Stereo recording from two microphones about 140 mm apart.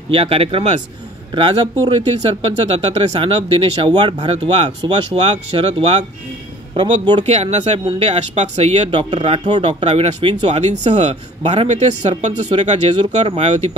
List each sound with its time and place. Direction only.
0.1 s speech: 45° right (ahead or behind)
7.2 s speech: 50° right (ahead or behind)
9.4 s speech: 35° right (ahead or behind); by 13.7 s 50° right (ahead or behind)